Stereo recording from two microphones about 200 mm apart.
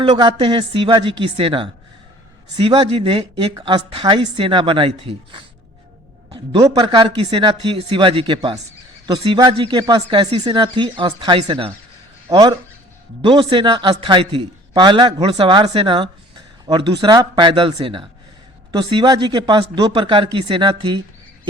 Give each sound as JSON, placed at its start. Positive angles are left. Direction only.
{"t": 0.0, "sound": "a man's voice", "side_deg": -25}